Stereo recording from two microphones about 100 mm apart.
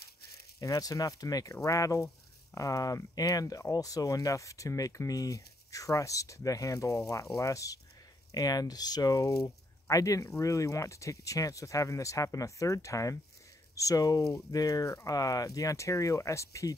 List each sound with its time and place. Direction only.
0.6 s speech: 35° left (ahead or behind)